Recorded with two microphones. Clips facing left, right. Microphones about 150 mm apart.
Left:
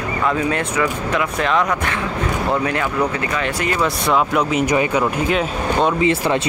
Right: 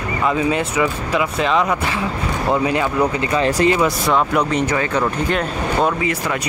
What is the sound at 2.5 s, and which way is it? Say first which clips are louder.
Speech: right 5 dB; 15° right (ahead or behind).